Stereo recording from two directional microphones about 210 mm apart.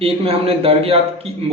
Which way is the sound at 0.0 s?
25° right (ahead or behind).